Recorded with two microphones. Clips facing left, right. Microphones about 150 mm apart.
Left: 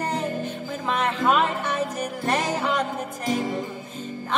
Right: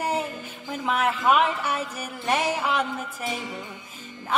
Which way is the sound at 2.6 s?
10° right (ahead or behind).